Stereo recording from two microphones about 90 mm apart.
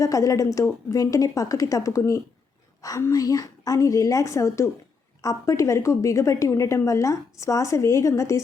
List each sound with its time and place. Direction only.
0.0 s a woman's voice: 40° left (ahead or behind)